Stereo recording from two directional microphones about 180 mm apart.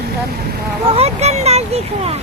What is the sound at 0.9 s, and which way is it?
Speech, 35° right (ahead or behind).